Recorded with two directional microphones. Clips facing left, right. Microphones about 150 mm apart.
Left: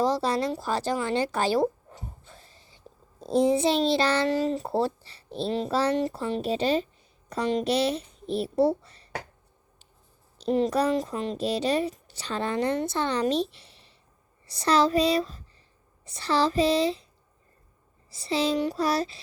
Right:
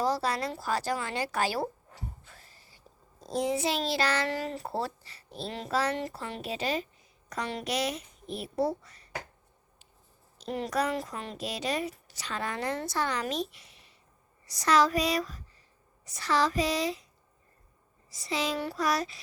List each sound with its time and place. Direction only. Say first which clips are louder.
0.0 s a sound: left 4 dB; 25° left (ahead or behind)
3.2 s a woman's voice: left 7 dB; 25° left (ahead or behind)
10.3 s a woman's voice: left 7 dB; 25° left (ahead or behind)
18.1 s a woman's voice: left 6 dB; 30° left (ahead or behind)
18.5 s a woman's voice: left 7 dB; 20° left (ahead or behind)
18.8 s a woman's voice: left 3 dB; 30° left (ahead or behind)